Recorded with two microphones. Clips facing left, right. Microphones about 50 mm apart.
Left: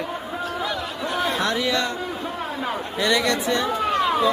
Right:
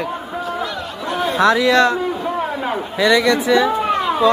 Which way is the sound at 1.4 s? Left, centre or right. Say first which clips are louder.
Right 10 dB; right.